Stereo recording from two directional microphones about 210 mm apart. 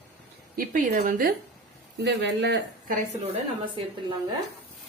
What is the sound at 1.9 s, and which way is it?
Speech, 55° right (ahead or behind).